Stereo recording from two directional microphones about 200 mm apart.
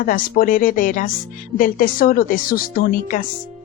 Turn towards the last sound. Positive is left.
turn(degrees=45)  # may be behind; listen again after turning